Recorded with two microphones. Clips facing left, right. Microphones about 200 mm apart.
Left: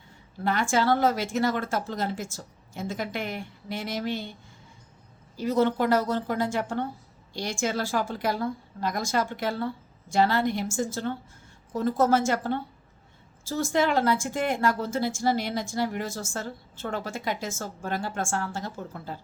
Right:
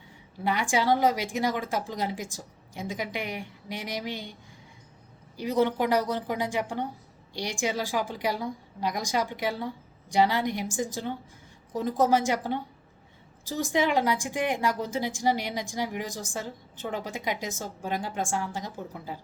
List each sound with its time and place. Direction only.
0.4 s speech: 15° right (ahead or behind)
5.4 s speech: 15° right (ahead or behind)